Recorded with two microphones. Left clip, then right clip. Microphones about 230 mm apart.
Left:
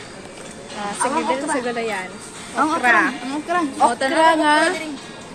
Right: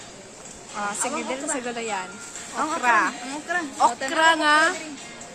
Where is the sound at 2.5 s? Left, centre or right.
Centre.